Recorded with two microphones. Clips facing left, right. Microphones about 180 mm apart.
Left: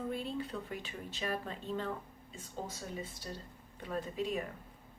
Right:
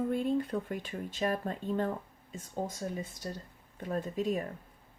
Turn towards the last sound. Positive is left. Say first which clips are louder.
# right 4 dB
turn(degrees=-45)  # may be behind; listen again after turning